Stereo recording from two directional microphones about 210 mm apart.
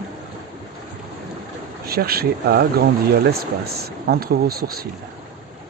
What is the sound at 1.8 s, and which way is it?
Speech, 45° right (ahead or behind).